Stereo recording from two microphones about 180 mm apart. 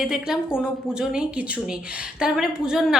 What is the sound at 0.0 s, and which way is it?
Speech, 5° right (ahead or behind).